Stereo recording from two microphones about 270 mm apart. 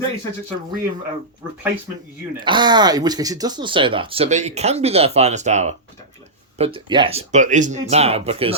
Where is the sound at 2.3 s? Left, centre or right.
Centre.